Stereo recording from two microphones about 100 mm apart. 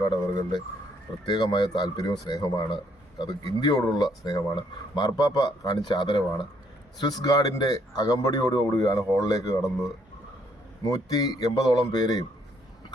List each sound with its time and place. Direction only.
0.1 s a man's voice: 45° left (ahead or behind)
10.8 s speech: 40° left (ahead or behind)